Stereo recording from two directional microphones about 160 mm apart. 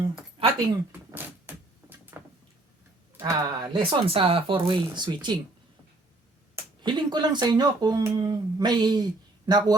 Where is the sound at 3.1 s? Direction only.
15° right (ahead or behind).